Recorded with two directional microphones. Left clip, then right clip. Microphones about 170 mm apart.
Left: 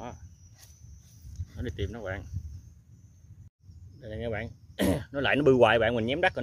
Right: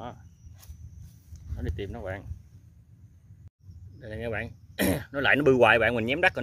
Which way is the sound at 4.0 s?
5° left (ahead or behind).